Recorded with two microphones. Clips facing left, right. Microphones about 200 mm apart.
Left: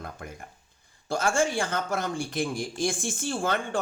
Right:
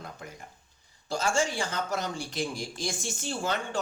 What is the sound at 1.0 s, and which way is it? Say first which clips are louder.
A man's voice: left 3 dB; 55° left (ahead or behind).